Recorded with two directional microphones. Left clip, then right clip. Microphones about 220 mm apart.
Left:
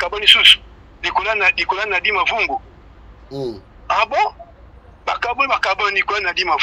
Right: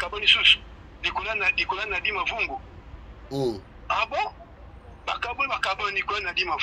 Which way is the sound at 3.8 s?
25° left (ahead or behind).